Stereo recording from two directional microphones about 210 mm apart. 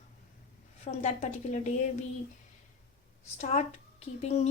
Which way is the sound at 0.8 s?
35° left (ahead or behind).